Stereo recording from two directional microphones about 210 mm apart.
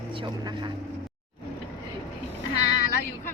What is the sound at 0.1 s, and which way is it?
Speech, 20° right (ahead or behind).